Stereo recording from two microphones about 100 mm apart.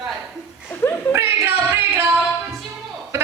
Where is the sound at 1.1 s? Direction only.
20° right (ahead or behind).